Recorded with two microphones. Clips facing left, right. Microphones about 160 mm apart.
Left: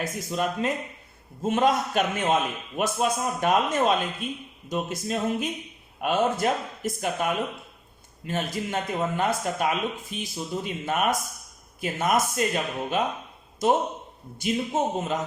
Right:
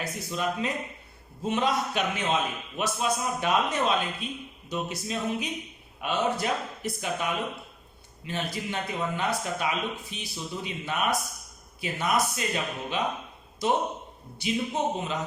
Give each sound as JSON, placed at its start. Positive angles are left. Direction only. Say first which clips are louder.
{"t": 0.0, "sound": "a man's voice", "louder": "left 3 dB", "side_deg": 50}